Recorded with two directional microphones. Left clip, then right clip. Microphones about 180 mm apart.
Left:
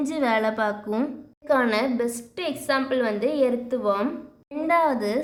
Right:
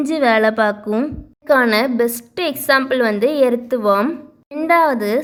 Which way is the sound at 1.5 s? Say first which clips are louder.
Right 8 dB; 35° right (ahead or behind).